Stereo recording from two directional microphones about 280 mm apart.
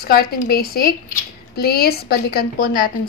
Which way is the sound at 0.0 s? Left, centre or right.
Left.